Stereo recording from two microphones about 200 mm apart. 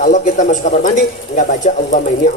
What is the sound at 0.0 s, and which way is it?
Speech, 40° left (ahead or behind).